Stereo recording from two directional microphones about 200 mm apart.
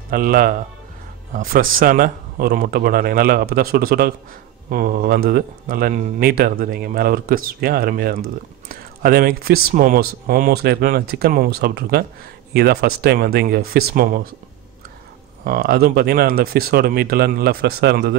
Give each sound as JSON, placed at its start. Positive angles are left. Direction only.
{"t": 0.1, "sound": "speech", "side_deg": -45}
{"t": 15.4, "sound": "speech", "side_deg": -50}